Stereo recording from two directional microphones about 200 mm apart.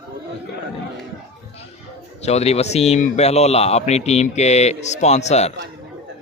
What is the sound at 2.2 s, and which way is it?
Speech, 30° left (ahead or behind).